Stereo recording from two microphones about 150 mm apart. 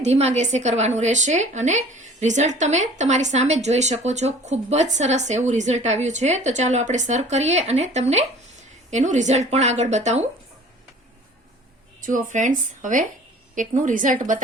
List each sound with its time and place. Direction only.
0.0 s a woman's voice: 45° right (ahead or behind)
11.9 s speech: 60° right (ahead or behind)